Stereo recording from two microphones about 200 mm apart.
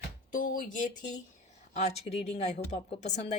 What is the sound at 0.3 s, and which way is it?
Speech, 45° left (ahead or behind).